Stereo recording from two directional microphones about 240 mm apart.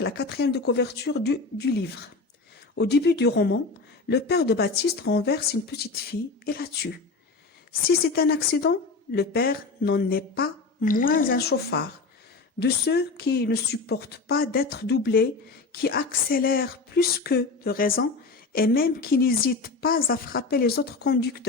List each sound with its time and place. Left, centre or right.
0.0 s a woman's voice: left